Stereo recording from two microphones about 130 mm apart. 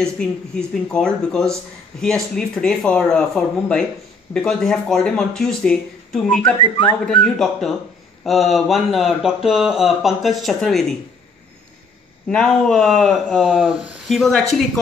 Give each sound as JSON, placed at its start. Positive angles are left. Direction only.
{"t": 0.0, "sound": "speech", "side_deg": 5}
{"t": 6.6, "sound": "a man's voice", "side_deg": 40}
{"t": 7.1, "sound": "speech", "side_deg": 5}
{"t": 12.3, "sound": "speech", "side_deg": 5}